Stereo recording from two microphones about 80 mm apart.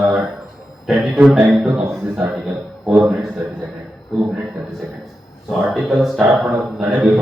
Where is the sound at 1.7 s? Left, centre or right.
Right.